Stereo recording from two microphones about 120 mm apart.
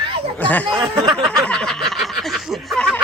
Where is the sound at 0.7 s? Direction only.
50° right (ahead or behind).